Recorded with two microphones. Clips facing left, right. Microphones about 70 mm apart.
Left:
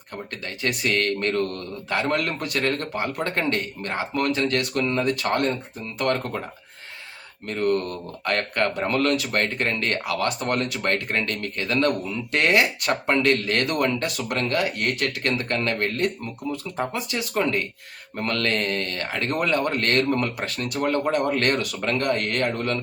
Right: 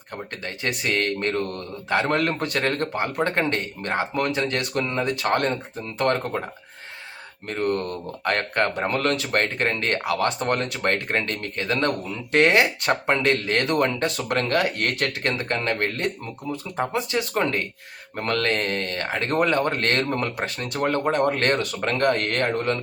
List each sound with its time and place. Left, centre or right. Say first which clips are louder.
0.1 s speech: right 1 dB; right
7.4 s speech: left 1 dB; right
15.2 s speech: even; right
20.7 s speech: right 1 dB; right